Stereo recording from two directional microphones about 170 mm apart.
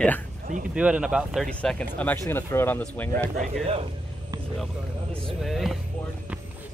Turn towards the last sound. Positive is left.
turn(degrees=0)  # may be behind; listen again after turning